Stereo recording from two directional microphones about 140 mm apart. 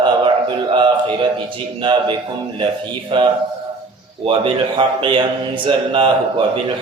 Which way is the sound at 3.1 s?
35° right (ahead or behind).